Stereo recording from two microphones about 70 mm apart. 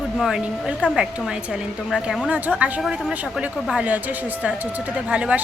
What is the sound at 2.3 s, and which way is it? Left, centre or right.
Speech, right.